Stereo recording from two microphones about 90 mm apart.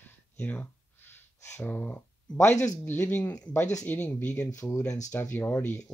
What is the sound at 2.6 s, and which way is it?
Speech, 20° left (ahead or behind).